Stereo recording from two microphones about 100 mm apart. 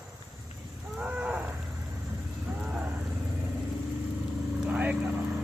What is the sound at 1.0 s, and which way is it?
Cattle, 15° right (ahead or behind).